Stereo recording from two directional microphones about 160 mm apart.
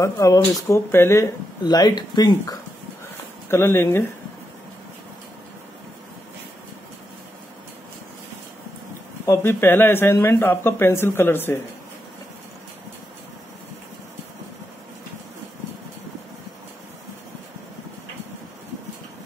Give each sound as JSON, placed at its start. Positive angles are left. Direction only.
{"t": 0.0, "sound": "speech", "side_deg": 20}
{"t": 9.2, "sound": "speech", "side_deg": 15}